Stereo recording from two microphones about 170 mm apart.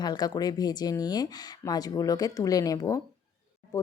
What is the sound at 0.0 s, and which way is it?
Speech, 25° left (ahead or behind).